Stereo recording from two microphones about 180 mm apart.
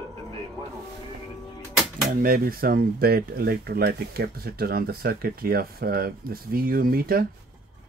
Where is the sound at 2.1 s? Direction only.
55° right (ahead or behind).